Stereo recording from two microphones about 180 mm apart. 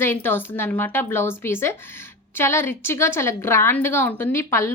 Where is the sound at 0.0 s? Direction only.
15° left (ahead or behind).